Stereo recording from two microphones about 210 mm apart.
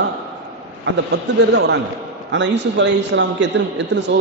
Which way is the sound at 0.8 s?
55° right (ahead or behind).